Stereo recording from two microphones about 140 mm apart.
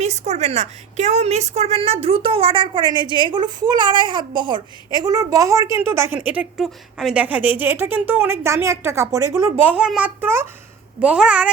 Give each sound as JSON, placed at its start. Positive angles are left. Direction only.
{"t": 0.0, "sound": "a woman's voice", "side_deg": -55}
{"t": 9.7, "sound": "a woman's voice", "side_deg": -5}